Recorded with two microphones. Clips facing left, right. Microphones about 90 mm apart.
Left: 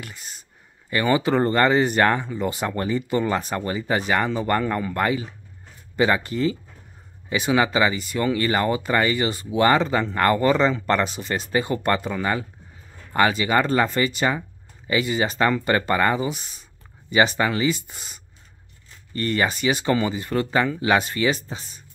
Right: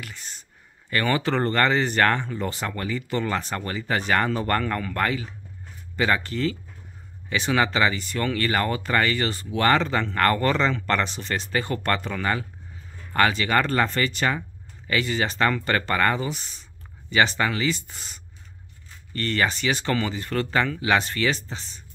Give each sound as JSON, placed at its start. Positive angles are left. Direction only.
{"t": 0.1, "sound": "speech", "side_deg": 10}
{"t": 2.7, "sound": "speech", "side_deg": 25}
{"t": 3.2, "sound": "speech", "side_deg": 15}
{"t": 4.6, "sound": "speech", "side_deg": 15}